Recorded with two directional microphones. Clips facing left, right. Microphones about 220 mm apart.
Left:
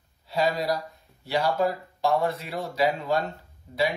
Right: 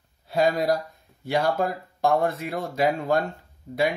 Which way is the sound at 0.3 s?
50° right (ahead or behind).